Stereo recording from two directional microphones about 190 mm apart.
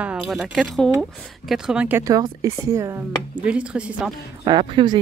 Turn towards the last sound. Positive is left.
turn(degrees=-25)  # may be behind; listen again after turning